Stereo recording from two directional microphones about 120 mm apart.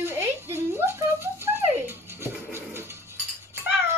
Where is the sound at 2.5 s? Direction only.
20° right (ahead or behind).